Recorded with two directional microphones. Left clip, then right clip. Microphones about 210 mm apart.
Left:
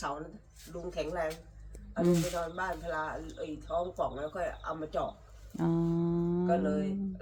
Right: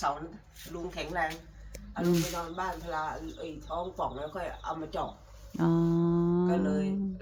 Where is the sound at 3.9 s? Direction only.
Centre (ahead or behind).